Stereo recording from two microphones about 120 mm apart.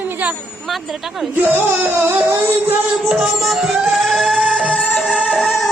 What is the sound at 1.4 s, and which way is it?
Music, 15° right (ahead or behind).